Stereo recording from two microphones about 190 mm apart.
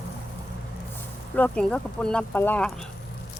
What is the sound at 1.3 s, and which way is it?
Speech, 5° left (ahead or behind).